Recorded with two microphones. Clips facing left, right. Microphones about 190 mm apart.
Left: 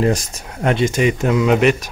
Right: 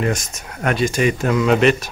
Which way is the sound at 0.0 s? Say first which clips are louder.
Left 4 dB; 30° left (ahead or behind).